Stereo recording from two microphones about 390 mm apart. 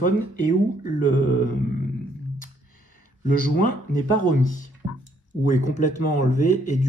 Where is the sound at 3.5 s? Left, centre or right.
Left.